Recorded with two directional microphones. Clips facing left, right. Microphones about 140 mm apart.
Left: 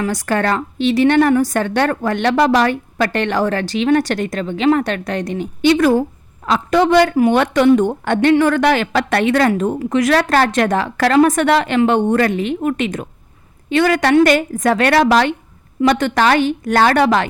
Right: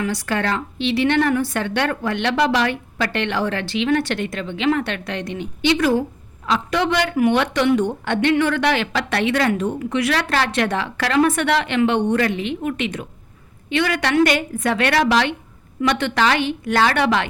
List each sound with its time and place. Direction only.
0.0 s a woman's voice: 45° left (ahead or behind)